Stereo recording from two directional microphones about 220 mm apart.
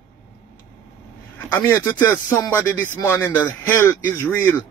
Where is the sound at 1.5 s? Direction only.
10° left (ahead or behind).